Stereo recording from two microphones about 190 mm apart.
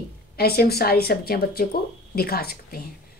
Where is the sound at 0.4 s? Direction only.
55° left (ahead or behind).